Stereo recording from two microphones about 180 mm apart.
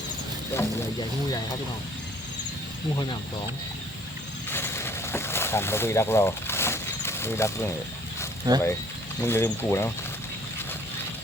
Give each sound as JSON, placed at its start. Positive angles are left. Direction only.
{"t": 0.5, "sound": "speech", "side_deg": 15}
{"t": 4.5, "sound": "a sound", "side_deg": 15}
{"t": 8.5, "sound": "speech", "side_deg": -20}
{"t": 9.2, "sound": "speech", "side_deg": 10}